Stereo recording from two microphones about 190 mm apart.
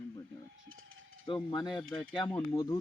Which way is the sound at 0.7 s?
90° right.